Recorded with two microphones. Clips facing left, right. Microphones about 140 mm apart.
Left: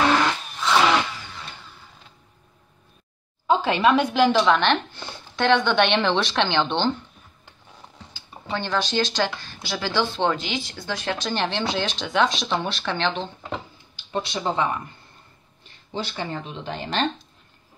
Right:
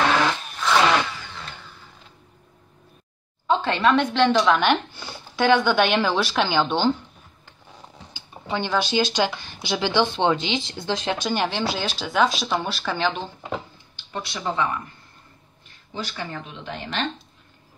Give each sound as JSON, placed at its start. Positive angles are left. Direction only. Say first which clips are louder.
{"t": 3.4, "sound": "speech", "louder": "left 1 dB", "side_deg": 10}
{"t": 8.1, "sound": "speech", "louder": "right 1 dB", "side_deg": -15}
{"t": 14.1, "sound": "speech", "louder": "left 2 dB", "side_deg": 25}
{"t": 15.9, "sound": "speech", "louder": "left 2 dB", "side_deg": 25}